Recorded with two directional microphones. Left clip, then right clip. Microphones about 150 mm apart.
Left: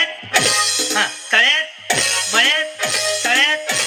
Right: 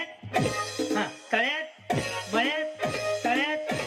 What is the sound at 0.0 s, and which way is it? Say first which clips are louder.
Music: left 12 dB; 10° left (ahead or behind).